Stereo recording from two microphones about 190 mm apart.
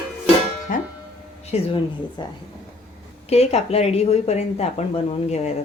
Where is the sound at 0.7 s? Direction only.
45° left (ahead or behind).